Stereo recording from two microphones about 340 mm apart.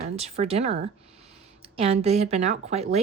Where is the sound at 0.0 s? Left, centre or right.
Centre.